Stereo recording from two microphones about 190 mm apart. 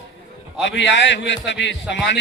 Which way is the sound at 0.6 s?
70° left (ahead or behind).